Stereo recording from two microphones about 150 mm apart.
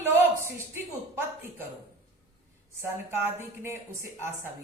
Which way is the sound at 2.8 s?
15° right (ahead or behind).